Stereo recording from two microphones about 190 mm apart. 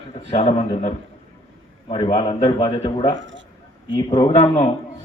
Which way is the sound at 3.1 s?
75° right (ahead or behind).